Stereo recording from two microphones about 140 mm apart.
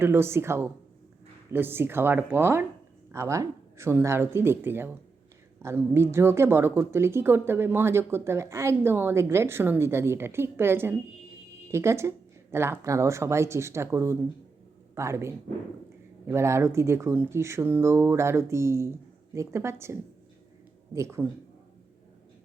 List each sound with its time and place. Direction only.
0.0 s a woman's voice: 15° right (ahead or behind)